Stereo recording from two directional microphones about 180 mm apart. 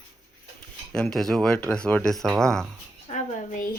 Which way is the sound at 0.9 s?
5° left (ahead or behind).